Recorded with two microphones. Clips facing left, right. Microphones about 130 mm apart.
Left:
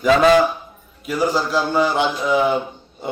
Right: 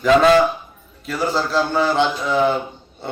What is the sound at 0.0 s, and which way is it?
A man's voice, 10° left (ahead or behind).